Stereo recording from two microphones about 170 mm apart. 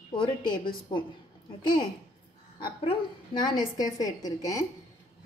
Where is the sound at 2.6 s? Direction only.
25° left (ahead or behind).